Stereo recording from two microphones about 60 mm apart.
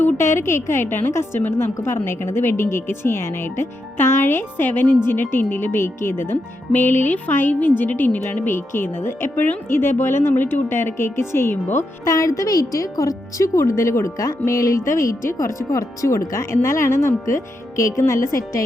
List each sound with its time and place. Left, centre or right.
0.2 s a woman's voice: left
1.8 s speech: left
9.3 s a woman's voice: left
12.0 s a woman's voice: left